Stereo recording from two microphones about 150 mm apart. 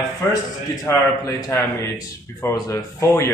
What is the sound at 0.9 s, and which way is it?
Speech, 15° left (ahead or behind).